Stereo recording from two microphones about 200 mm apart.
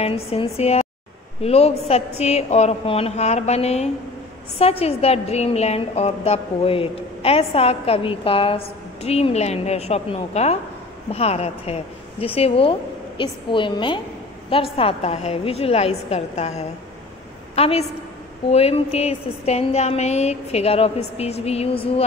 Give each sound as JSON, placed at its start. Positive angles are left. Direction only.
{"t": 0.0, "sound": "a woman's voice", "side_deg": 30}